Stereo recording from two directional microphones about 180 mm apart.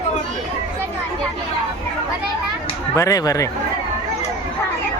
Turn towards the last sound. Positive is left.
turn(degrees=20)  # may be behind; listen again after turning